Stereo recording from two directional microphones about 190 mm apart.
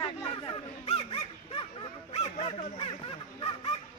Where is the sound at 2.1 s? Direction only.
30° left (ahead or behind).